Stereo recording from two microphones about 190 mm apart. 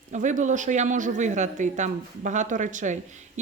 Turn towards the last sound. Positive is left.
turn(degrees=-40)  # may be behind; listen again after turning